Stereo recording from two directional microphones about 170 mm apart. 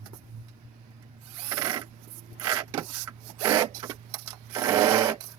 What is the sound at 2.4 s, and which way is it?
Printer, 20° right (ahead or behind).